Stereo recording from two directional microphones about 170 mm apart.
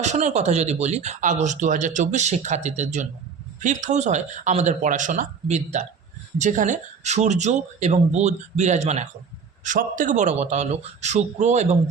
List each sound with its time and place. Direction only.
0.0 s speech: 45° right (ahead or behind)